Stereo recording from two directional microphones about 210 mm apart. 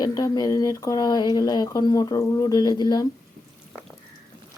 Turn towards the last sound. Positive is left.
turn(degrees=20)  # may be behind; listen again after turning